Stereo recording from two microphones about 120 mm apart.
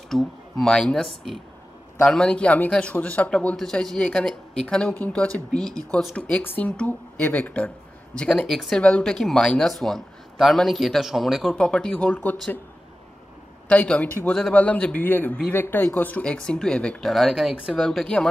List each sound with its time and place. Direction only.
0.1 s a man's voice: 5° left (ahead or behind)
13.7 s a man's voice: 10° left (ahead or behind)